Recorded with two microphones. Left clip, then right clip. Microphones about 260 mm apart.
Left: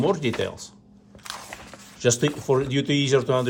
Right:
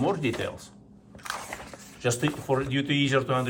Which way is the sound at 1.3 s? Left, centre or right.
Centre.